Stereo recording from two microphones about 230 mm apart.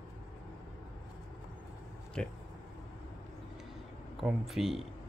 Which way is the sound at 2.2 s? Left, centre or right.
Centre.